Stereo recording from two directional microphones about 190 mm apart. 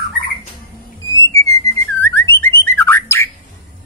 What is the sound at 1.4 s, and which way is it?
Whistling, 15° left (ahead or behind).